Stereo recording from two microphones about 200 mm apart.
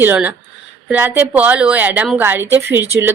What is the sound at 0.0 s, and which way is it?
Speech, 10° right (ahead or behind).